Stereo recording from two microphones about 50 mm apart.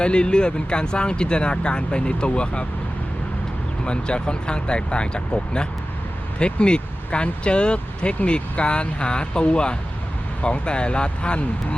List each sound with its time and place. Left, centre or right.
0.0 s speech: centre
3.8 s speech: centre